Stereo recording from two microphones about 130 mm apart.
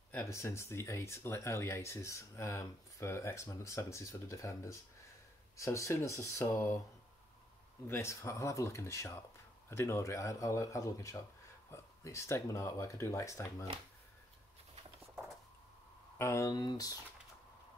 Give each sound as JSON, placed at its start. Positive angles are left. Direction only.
{"t": 0.1, "sound": "speech", "side_deg": 20}
{"t": 7.8, "sound": "speech", "side_deg": 20}
{"t": 16.2, "sound": "speech", "side_deg": 20}